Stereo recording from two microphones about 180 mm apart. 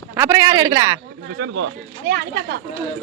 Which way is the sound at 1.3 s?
75° right (ahead or behind).